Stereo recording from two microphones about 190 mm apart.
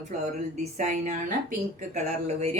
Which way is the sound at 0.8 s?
40° right (ahead or behind).